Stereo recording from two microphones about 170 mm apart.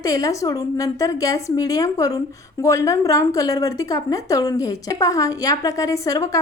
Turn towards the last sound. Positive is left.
turn(degrees=20)  # may be behind; listen again after turning